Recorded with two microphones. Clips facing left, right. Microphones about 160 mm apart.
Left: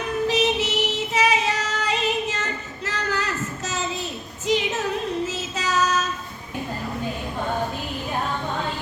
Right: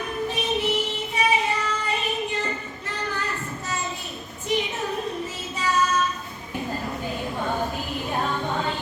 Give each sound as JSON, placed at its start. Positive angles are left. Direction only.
{"t": 0.3, "sound": "music", "side_deg": 85}
{"t": 4.4, "sound": "music", "side_deg": 90}
{"t": 5.2, "sound": "child singing", "side_deg": 85}